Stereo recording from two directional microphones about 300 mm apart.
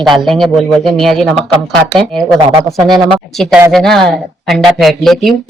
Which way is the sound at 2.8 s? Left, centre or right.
Centre.